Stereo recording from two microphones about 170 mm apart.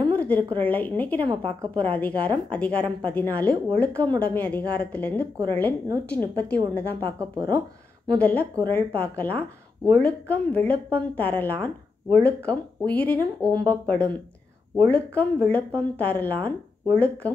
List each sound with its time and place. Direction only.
0.1 s a sound: 10° left (ahead or behind)
0.6 s speech: 10° left (ahead or behind)
1.2 s a woman's voice: 30° right (ahead or behind)
1.7 s speech: 10° left (ahead or behind)
7.0 s speech: 25° right (ahead or behind)
8.1 s speech: 10° left (ahead or behind)